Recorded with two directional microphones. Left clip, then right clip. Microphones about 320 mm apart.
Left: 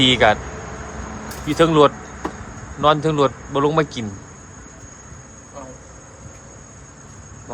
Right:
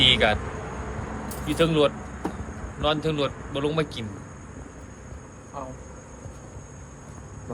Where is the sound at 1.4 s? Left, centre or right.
Left.